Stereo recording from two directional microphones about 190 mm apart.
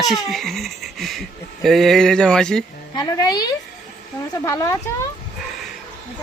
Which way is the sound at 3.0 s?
20° left (ahead or behind).